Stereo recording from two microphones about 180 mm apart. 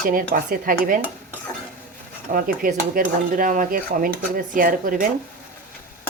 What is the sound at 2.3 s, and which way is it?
Dishes, 50° right (ahead or behind).